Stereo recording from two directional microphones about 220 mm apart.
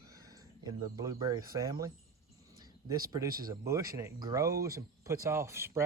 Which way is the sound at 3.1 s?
15° right (ahead or behind).